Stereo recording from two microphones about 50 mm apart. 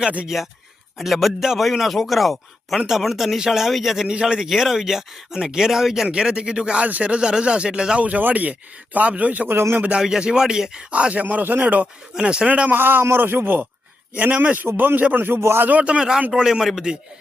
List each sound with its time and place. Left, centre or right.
0.3 s a man's voice: centre
4.1 s speech: centre
8.0 s speech: right
9.5 s a man's voice: right
9.7 s speech: right
10.0 s speech: centre
10.9 s speech: right
12.1 s speech: centre
12.7 s speech: right
14.3 s speech: right
15.4 s a man's voice: right
15.8 s speech: centre